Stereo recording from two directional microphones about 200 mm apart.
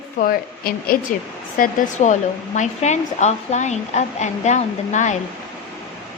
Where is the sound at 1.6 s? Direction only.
40° left (ahead or behind).